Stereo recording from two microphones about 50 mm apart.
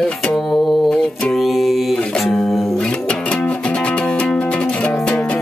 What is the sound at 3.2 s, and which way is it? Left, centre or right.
Music, left.